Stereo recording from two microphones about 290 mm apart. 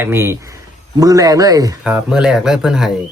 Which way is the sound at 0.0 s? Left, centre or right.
Centre.